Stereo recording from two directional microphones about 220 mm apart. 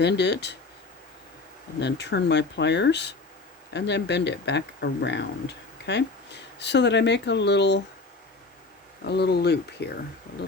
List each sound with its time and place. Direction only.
0.0 s speech: 50° left (ahead or behind)
1.8 s speech: 50° left (ahead or behind)
9.0 s speech: 50° left (ahead or behind)